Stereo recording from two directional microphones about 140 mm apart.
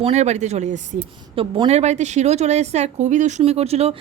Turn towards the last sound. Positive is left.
turn(degrees=-45)  # may be behind; listen again after turning